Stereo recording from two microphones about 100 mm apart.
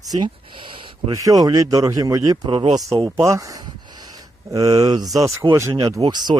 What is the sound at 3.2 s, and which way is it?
Speech, 35° right (ahead or behind).